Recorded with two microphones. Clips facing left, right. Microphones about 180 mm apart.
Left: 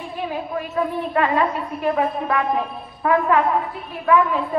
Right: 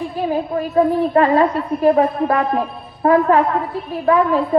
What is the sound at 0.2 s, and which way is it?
A woman's voice, 35° right (ahead or behind).